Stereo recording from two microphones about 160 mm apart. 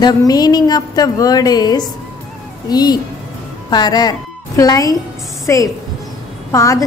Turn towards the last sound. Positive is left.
turn(degrees=20)  # may be behind; listen again after turning